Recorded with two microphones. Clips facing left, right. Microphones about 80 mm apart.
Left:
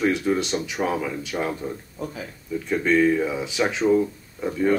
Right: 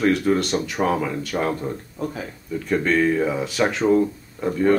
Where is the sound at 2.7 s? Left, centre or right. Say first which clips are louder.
Even; centre.